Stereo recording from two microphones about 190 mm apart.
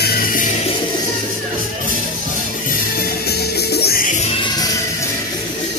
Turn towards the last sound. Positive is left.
turn(degrees=25)  # may be behind; listen again after turning